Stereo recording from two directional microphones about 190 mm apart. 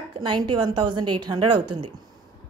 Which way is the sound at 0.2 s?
25° right (ahead or behind).